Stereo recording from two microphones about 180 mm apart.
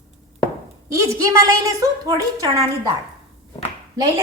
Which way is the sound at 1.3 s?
20° right (ahead or behind).